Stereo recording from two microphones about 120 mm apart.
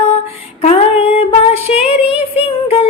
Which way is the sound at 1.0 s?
55° left (ahead or behind).